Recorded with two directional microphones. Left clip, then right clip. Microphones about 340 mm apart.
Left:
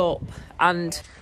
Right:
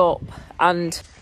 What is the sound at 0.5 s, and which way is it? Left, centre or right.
Speech, centre.